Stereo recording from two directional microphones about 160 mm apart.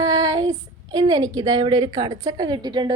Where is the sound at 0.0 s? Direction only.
25° right (ahead or behind).